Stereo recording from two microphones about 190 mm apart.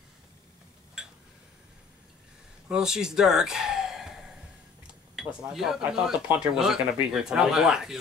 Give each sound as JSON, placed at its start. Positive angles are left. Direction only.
{"t": 1.0, "sound": "a sound", "side_deg": -5}
{"t": 2.7, "sound": "speech", "side_deg": -5}
{"t": 5.1, "sound": "speech", "side_deg": -5}